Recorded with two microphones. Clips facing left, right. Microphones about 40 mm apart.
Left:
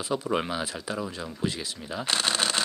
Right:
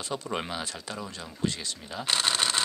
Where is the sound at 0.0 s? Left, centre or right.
Centre.